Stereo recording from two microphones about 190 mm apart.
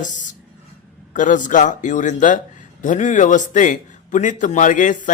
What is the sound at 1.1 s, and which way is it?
A man's voice, 40° left (ahead or behind).